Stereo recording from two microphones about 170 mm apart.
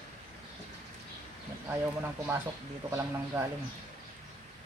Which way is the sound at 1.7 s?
15° right (ahead or behind).